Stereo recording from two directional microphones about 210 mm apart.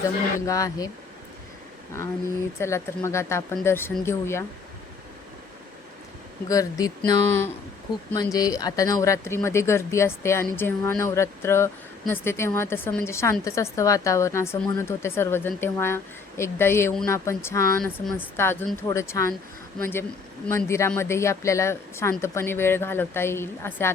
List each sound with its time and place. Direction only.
0.3 s speech: 15° left (ahead or behind)
2.6 s speech: 15° left (ahead or behind)
6.5 s speech: 15° left (ahead or behind)